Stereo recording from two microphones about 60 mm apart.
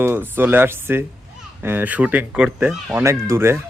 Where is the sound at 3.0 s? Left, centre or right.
Right.